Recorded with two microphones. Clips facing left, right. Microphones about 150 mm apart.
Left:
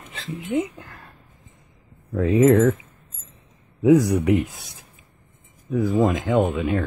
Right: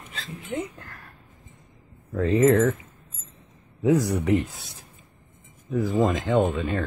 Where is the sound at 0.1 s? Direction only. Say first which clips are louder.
Left 7 dB; 20° left (ahead or behind).